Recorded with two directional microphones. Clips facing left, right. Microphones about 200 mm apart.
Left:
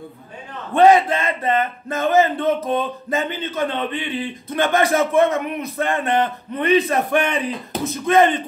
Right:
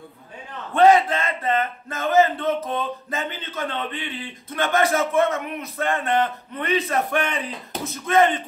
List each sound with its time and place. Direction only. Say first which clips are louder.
0.7 s speech: left 2 dB; 15° left (ahead or behind)